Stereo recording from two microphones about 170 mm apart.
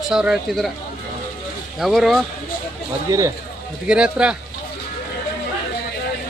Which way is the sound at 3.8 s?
5° right (ahead or behind).